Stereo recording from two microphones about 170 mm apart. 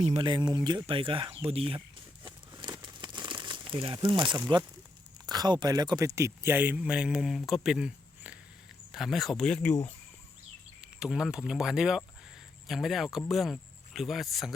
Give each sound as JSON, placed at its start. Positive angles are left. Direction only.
{"t": 0.2, "sound": "speech", "side_deg": -25}
{"t": 2.6, "sound": "crumpling", "side_deg": -25}
{"t": 5.2, "sound": "speech", "side_deg": -25}
{"t": 10.8, "sound": "speech", "side_deg": -5}